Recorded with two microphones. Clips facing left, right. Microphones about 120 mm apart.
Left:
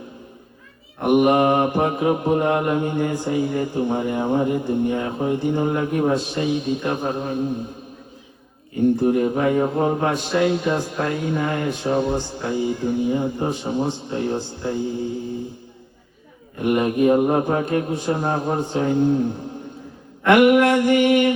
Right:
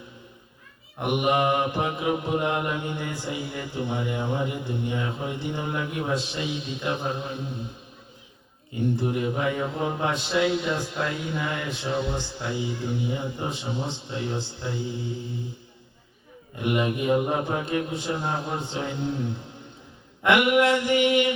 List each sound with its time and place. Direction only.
1.0 s mantra: 45° left (ahead or behind)
9.0 s mantra: 45° left (ahead or behind)
16.6 s mantra: 45° left (ahead or behind)